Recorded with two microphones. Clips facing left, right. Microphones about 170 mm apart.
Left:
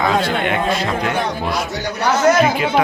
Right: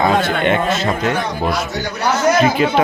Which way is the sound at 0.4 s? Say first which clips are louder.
Right 2 dB; 25° right (ahead or behind).